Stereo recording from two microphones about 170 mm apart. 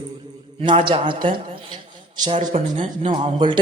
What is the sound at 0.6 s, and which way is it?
A man's voice, 30° right (ahead or behind).